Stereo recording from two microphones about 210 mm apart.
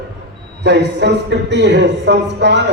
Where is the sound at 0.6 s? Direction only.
55° right (ahead or behind).